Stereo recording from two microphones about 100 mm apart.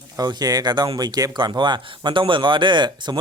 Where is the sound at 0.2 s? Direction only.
40° right (ahead or behind).